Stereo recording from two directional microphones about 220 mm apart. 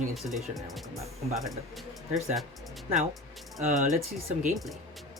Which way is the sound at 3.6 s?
30° right (ahead or behind).